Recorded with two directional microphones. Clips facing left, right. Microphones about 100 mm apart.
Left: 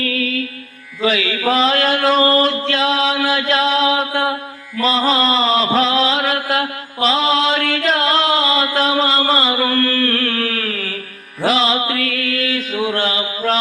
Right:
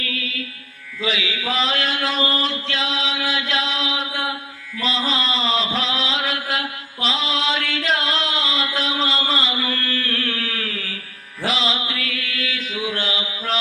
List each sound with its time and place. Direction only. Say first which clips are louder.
0.0 s music: left 9 dB; 50° left (ahead or behind)
1.0 s a sound: left 7 dB; 50° left (ahead or behind)
11.4 s mantra: left 7 dB; 50° left (ahead or behind)